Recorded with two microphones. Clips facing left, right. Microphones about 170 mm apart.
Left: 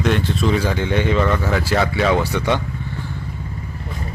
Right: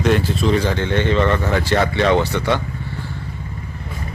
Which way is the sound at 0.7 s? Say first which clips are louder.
Even; 10° left (ahead or behind).